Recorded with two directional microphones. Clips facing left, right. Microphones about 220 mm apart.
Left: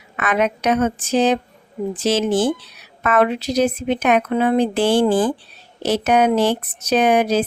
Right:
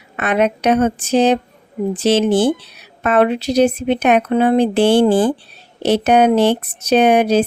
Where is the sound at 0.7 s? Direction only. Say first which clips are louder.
Right 3 dB; 30° right (ahead or behind).